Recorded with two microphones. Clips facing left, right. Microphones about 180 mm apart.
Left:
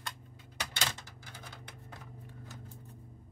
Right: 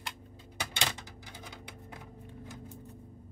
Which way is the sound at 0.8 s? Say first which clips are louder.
Right 3 dB; 15° right (ahead or behind).